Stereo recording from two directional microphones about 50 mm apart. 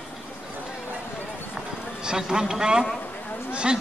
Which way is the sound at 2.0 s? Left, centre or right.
Centre.